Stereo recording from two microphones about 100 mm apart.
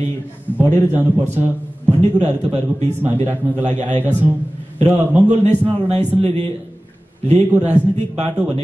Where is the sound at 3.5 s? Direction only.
20° left (ahead or behind).